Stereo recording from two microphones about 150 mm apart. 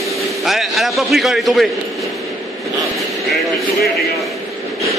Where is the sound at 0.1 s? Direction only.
Centre (ahead or behind).